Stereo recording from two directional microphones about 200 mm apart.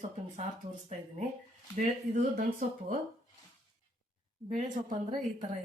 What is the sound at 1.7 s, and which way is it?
Speech, 40° right (ahead or behind).